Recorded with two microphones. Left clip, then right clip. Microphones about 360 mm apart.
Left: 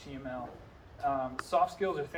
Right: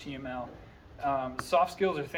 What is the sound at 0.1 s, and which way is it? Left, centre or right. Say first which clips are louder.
Speech: right 2 dB; right.